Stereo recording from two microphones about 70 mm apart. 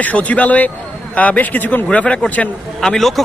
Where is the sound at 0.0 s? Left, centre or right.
Left.